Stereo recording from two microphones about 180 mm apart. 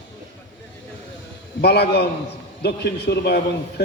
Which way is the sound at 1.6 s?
60° left (ahead or behind).